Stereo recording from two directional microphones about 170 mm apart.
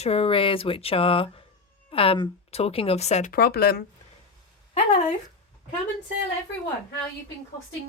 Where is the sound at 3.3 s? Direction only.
65° left (ahead or behind).